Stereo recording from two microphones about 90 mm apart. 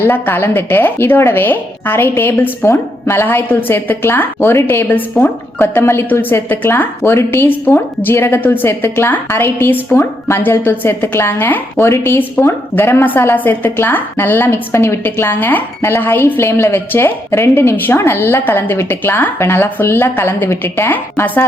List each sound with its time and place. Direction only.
0.0 s a woman's voice: 25° left (ahead or behind)